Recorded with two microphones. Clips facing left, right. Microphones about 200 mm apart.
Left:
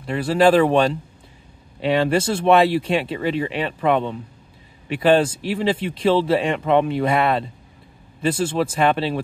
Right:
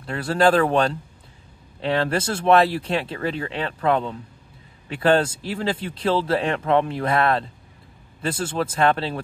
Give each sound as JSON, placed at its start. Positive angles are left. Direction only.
{"t": 0.0, "sound": "speech", "side_deg": 5}
{"t": 1.8, "sound": "speech", "side_deg": 10}